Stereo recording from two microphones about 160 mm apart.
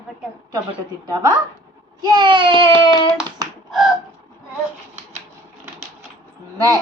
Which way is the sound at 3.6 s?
Centre (ahead or behind).